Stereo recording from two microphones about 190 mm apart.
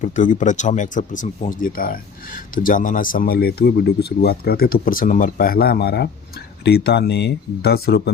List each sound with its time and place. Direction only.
0.0 s speech: 40° left (ahead or behind); by 8.1 s 55° left (ahead or behind)